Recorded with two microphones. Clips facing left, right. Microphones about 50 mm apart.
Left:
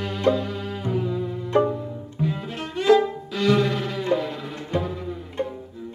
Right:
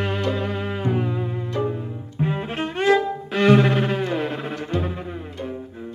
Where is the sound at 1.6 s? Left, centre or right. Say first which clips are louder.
Even; right.